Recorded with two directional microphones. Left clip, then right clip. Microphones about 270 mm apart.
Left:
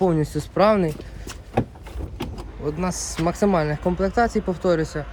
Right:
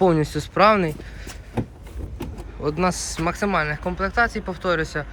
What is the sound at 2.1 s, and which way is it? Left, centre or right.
Vehicle, centre.